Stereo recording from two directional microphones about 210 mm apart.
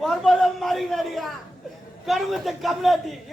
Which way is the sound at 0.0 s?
Centre (ahead or behind).